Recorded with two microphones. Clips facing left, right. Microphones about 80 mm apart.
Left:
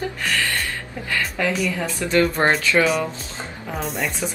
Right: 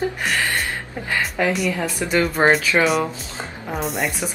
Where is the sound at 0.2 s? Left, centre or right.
Centre.